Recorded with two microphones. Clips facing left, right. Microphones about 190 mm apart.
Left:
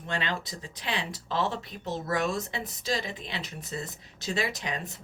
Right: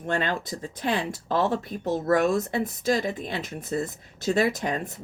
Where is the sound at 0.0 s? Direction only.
50° right (ahead or behind).